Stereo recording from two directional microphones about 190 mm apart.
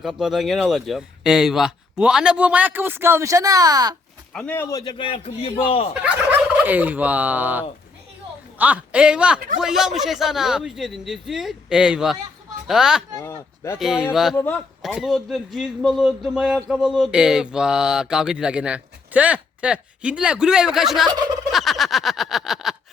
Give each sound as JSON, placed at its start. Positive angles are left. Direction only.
{"t": 0.0, "sound": "speech", "side_deg": 0}
{"t": 4.4, "sound": "a man's voice", "side_deg": 10}
{"t": 6.6, "sound": "speech", "side_deg": -10}
{"t": 14.3, "sound": "a man's voice", "side_deg": 10}
{"t": 21.5, "sound": "a sound", "side_deg": 0}